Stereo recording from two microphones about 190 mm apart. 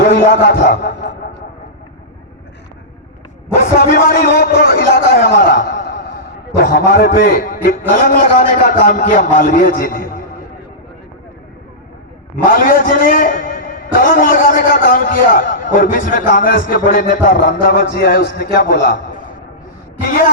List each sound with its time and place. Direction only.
0.0 s a man's voice: 45° left (ahead or behind)
0.5 s speech: 60° left (ahead or behind)
0.8 s a sound: 55° left (ahead or behind)
3.6 s a sound: 50° left (ahead or behind)
6.6 s a man's voice: 55° left (ahead or behind)
12.5 s a man's voice: 45° left (ahead or behind)